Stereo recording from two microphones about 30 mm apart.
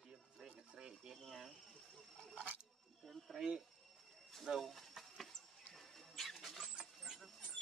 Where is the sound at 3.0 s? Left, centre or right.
Centre.